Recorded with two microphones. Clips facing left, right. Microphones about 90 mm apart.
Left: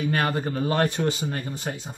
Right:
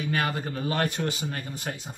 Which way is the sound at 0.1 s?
40° left (ahead or behind).